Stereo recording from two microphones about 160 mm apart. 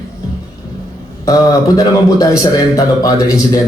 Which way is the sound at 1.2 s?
20° left (ahead or behind).